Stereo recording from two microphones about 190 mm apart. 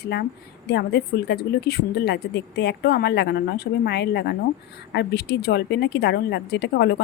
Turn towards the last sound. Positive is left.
turn(degrees=60)  # may be behind; listen again after turning